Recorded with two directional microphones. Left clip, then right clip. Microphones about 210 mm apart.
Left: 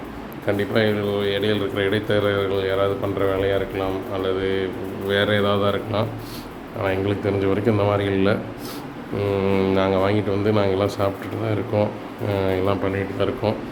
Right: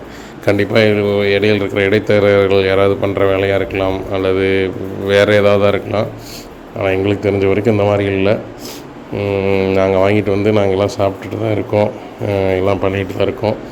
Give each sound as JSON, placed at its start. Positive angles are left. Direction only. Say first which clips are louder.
{"t": 0.4, "sound": "a man's voice", "louder": "right 9 dB", "side_deg": -35}